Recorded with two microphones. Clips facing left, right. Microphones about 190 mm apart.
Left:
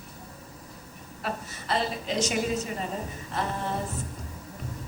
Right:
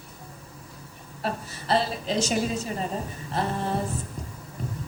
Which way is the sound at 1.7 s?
30° right (ahead or behind).